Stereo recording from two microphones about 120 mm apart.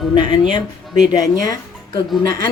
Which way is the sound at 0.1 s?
40° left (ahead or behind).